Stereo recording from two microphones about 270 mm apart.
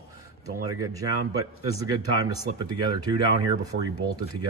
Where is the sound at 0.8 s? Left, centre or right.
Centre.